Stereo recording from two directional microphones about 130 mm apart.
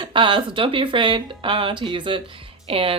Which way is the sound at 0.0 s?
40° right (ahead or behind).